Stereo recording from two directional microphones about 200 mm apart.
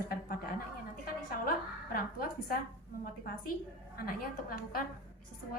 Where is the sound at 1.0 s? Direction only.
45° left (ahead or behind).